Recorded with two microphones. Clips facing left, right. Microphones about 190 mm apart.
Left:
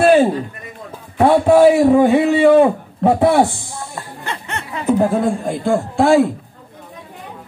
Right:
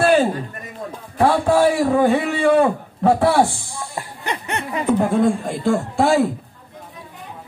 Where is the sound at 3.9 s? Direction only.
15° right (ahead or behind).